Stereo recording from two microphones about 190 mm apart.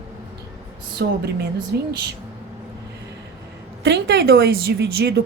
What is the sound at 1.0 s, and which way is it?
Speech, 60° right (ahead or behind).